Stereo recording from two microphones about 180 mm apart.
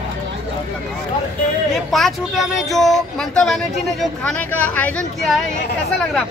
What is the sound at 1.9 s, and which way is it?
Speech, centre (ahead or behind).